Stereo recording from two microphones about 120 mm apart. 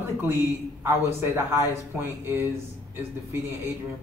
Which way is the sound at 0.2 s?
20° right (ahead or behind).